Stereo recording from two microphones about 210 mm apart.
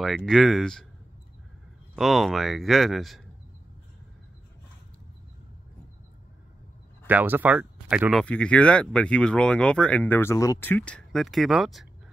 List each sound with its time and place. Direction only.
0.0 s speech: centre (ahead or behind)
2.0 s speech: centre (ahead or behind)
7.1 s speech: 10° right (ahead or behind)